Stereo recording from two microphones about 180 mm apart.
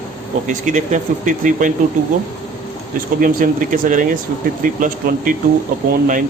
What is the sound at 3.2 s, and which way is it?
Speech, 50° right (ahead or behind).